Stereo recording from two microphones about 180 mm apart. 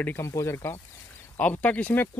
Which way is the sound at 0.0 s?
15° left (ahead or behind).